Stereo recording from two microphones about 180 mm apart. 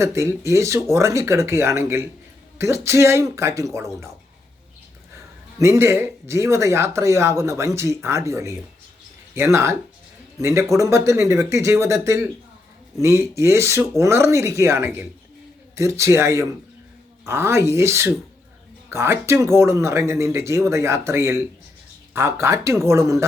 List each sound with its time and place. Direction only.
0.0 s speech: 15° right (ahead or behind)
5.5 s speech: 15° right (ahead or behind)